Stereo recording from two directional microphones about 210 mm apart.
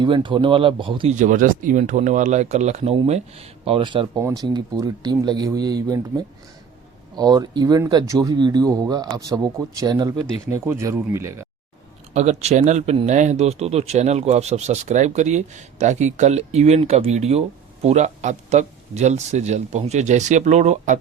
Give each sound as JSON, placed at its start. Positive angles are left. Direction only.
{"t": 0.0, "sound": "speech", "side_deg": -20}
{"t": 1.1, "sound": "speech", "side_deg": -40}
{"t": 12.1, "sound": "speech", "side_deg": -30}